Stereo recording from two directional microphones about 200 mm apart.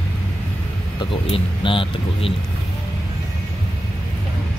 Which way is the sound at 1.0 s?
25° left (ahead or behind).